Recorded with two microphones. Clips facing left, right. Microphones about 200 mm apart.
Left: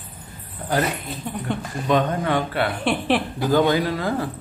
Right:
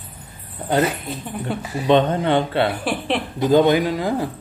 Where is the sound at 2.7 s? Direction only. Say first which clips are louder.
Left 2 dB; centre (ahead or behind).